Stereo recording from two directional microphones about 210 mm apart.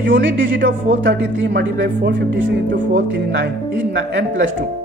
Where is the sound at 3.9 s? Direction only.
55° right (ahead or behind).